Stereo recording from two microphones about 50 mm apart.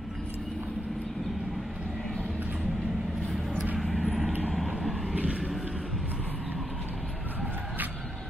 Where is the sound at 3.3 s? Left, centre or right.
Centre.